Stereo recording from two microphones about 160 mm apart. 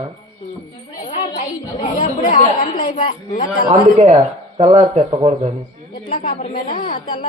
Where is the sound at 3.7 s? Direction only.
35° right (ahead or behind).